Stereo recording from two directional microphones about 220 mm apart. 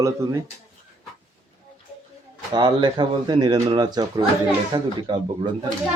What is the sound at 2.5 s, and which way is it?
Speech, 20° right (ahead or behind).